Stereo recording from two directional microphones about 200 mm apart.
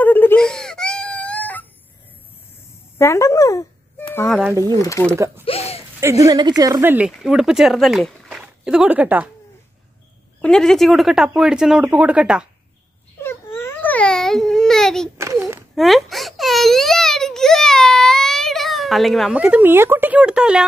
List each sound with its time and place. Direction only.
0.0 s wail: 10° left (ahead or behind)
3.0 s speech: 15° left (ahead or behind)
4.3 s speech: 5° right (ahead or behind)
4.7 s speech: 15° left (ahead or behind)
5.4 s a sound: 30° left (ahead or behind)
5.9 s speech: 15° right (ahead or behind)
10.4 s speech: 5° left (ahead or behind)
13.2 s babbling: 10° left (ahead or behind)
15.1 s a sound: 15° right (ahead or behind)
15.7 s a sound: centre (ahead or behind)